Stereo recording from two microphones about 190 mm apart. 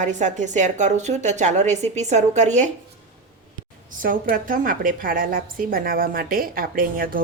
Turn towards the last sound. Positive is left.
turn(degrees=-50)  # may be behind; listen again after turning